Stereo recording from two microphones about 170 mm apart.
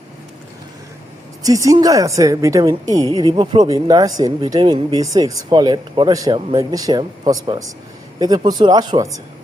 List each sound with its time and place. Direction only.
1.5 s speech: 20° right (ahead or behind)